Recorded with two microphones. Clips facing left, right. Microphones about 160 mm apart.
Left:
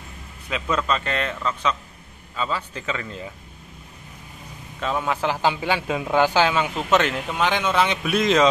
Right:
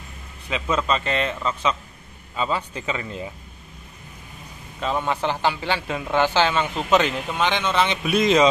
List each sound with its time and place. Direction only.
0.5 s a man's voice: centre (ahead or behind)
2.3 s a man's voice: 15° right (ahead or behind)
4.7 s a man's voice: centre (ahead or behind)